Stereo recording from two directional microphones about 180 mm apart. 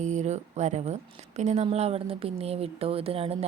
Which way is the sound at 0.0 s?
40° right (ahead or behind).